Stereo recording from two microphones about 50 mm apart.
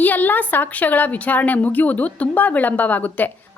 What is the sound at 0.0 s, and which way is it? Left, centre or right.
Speech, left.